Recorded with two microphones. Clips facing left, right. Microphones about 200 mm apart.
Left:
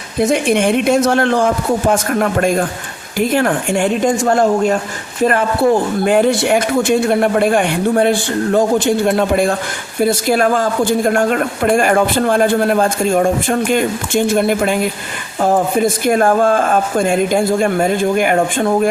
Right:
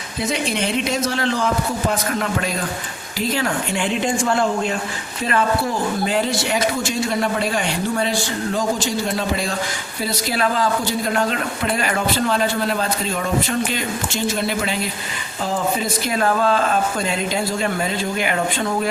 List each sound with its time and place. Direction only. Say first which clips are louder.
0.2 s speech: left 9 dB; 50° left (ahead or behind)